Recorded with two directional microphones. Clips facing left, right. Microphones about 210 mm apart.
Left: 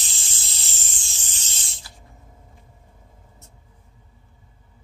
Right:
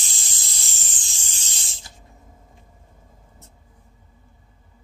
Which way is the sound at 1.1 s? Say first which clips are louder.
Even; 10° right (ahead or behind).